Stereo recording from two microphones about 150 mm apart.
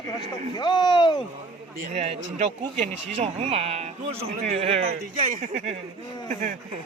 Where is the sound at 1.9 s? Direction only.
45° right (ahead or behind).